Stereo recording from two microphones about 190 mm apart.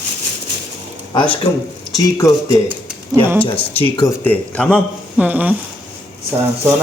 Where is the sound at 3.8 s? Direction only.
25° left (ahead or behind).